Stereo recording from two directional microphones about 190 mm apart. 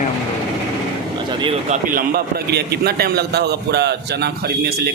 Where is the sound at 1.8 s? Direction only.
45° right (ahead or behind).